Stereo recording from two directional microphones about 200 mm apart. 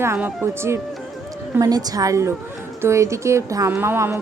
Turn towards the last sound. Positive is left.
turn(degrees=-15)  # may be behind; listen again after turning